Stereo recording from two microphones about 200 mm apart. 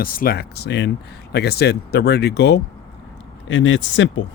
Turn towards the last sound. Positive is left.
turn(degrees=70)  # may be behind; listen again after turning